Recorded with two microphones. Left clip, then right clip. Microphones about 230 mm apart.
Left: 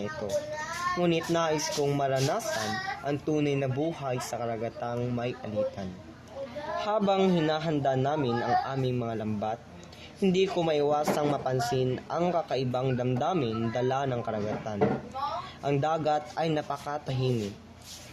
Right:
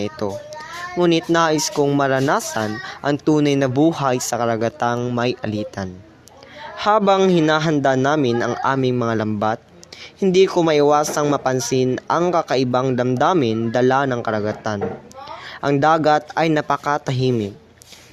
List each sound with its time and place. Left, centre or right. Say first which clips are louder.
0.9 s speech: right 13 dB; right
15.8 s speech: right 14 dB; right